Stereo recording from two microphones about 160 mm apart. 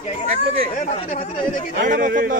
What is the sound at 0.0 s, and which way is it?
Speech, 40° left (ahead or behind).